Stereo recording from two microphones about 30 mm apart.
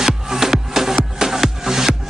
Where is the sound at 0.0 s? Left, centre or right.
Centre.